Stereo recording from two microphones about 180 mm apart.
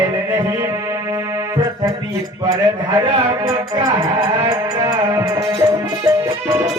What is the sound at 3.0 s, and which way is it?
Speech, 30° right (ahead or behind).